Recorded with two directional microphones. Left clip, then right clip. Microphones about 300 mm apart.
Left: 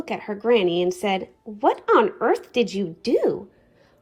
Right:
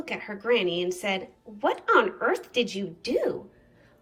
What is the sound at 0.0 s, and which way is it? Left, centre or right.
A woman's voice, centre.